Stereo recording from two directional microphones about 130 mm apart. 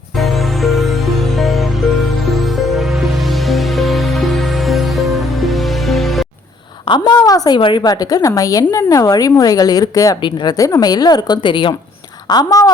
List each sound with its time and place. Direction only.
0.2 s music: centre (ahead or behind)
6.8 s a woman's voice: 35° left (ahead or behind)
12.3 s speech: 30° left (ahead or behind)